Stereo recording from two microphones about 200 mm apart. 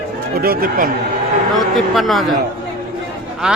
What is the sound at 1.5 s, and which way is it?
Speech, centre (ahead or behind).